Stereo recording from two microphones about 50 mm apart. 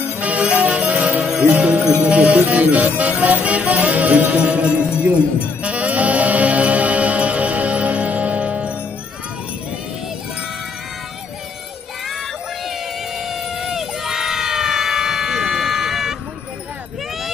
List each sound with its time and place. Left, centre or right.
0.0 s music: right
13.2 s crowd: centre